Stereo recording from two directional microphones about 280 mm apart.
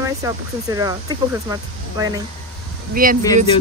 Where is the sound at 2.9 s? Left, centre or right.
Right.